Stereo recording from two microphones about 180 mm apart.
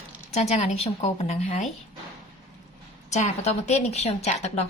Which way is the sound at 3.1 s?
40° left (ahead or behind).